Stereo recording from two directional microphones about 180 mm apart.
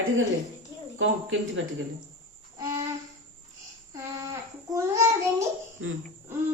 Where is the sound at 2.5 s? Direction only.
20° right (ahead or behind).